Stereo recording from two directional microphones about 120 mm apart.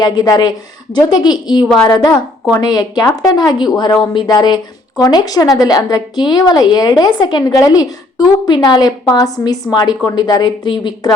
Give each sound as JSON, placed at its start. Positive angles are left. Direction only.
{"t": 0.0, "sound": "speech", "side_deg": 35}